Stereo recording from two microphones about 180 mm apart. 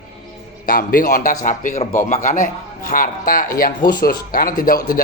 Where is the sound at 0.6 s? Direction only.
50° left (ahead or behind).